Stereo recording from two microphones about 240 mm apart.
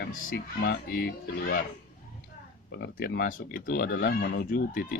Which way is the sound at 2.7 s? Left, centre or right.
Left.